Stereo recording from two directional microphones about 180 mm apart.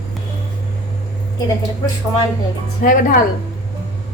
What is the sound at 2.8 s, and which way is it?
Speech, 50° left (ahead or behind).